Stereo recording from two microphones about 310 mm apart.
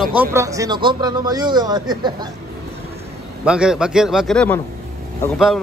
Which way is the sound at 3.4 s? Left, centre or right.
Centre.